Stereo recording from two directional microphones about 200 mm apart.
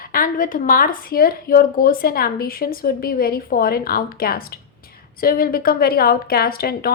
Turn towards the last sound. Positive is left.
turn(degrees=50)  # may be behind; listen again after turning